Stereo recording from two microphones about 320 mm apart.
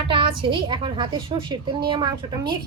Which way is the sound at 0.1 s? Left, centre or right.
Centre.